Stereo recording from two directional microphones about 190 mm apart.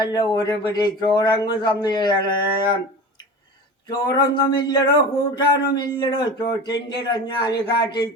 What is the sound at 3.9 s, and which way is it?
Speech, 25° left (ahead or behind).